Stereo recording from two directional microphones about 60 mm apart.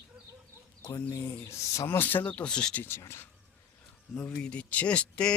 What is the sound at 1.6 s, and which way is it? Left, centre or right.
Speech, left.